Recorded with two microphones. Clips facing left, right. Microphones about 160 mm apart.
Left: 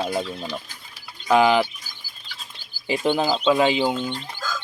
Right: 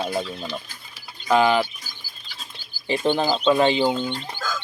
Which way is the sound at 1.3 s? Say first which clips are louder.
Left 1 dB; 15° left (ahead or behind).